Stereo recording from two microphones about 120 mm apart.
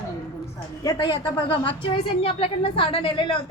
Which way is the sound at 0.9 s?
45° left (ahead or behind).